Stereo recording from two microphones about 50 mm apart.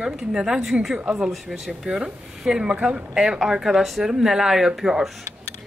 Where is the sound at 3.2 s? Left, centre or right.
Centre.